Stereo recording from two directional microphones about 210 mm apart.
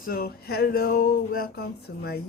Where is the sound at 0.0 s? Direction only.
45° left (ahead or behind).